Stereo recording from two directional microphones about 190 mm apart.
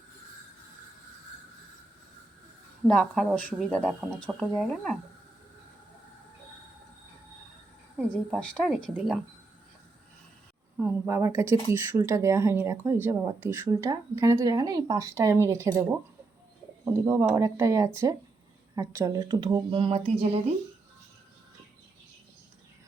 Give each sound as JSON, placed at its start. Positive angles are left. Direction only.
{"t": 2.8, "sound": "speech", "side_deg": 5}
{"t": 8.1, "sound": "speech", "side_deg": 5}
{"t": 10.8, "sound": "speech", "side_deg": -10}